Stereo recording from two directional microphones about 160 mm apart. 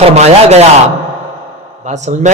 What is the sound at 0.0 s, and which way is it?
Speech, 40° right (ahead or behind).